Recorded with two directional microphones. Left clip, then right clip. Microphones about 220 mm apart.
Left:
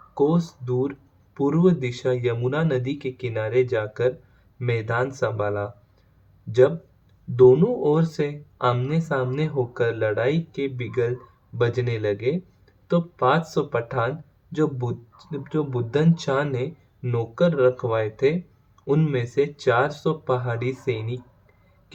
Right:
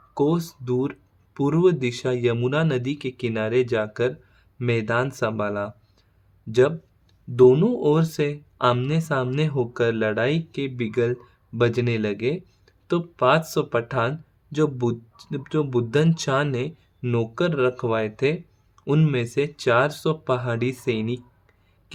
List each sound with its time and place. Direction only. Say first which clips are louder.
0.1 s speech: left 1 dB; 50° right (ahead or behind)